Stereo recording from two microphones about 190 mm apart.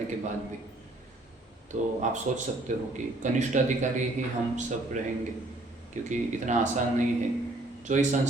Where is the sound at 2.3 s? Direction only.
40° right (ahead or behind).